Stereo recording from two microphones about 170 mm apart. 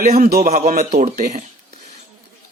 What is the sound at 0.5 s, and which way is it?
Speech, 45° right (ahead or behind).